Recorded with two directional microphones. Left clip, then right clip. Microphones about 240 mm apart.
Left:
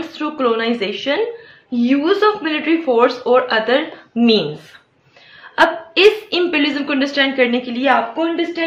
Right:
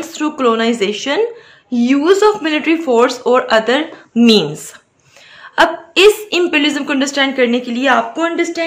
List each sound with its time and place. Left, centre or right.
0.1 s speech: right
5.4 s a woman's voice: right